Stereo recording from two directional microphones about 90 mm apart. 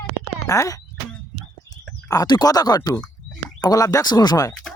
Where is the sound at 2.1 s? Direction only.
50° left (ahead or behind).